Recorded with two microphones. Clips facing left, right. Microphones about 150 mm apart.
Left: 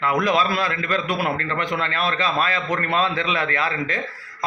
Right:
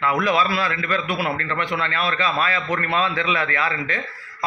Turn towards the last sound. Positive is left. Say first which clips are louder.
# left 1 dB
turn(degrees=40)  # may be behind; listen again after turning